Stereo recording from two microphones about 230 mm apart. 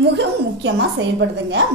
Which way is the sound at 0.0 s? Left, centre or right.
Right.